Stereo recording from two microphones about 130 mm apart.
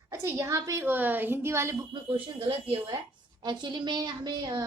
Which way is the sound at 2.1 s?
45° right (ahead or behind).